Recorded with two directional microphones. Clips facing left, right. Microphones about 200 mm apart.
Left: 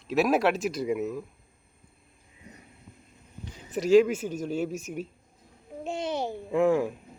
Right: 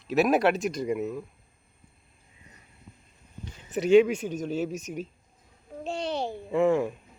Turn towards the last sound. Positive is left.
turn(degrees=5)  # may be behind; listen again after turning